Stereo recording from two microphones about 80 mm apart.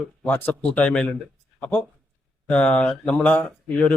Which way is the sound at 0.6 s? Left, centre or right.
Centre.